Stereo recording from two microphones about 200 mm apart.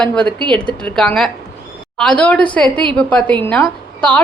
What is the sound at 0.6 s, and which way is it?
A woman's voice, 5° left (ahead or behind).